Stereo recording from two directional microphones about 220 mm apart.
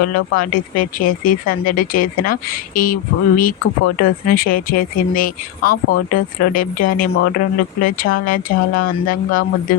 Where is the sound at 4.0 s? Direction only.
40° left (ahead or behind).